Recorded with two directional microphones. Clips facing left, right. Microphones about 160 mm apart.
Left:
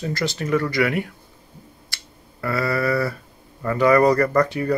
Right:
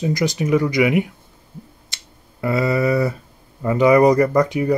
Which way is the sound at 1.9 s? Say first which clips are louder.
Left 1 dB; 20° right (ahead or behind).